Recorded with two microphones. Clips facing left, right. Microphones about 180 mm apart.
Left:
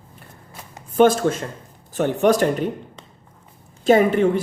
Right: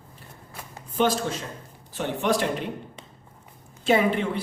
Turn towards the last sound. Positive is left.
turn(degrees=45)  # may be behind; listen again after turning